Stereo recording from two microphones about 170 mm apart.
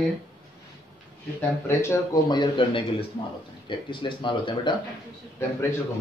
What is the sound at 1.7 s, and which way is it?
Speech, 15° left (ahead or behind).